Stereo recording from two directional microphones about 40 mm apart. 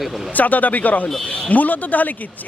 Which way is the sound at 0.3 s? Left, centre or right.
Left.